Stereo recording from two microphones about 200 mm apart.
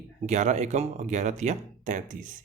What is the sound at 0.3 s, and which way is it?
Speech, 35° right (ahead or behind).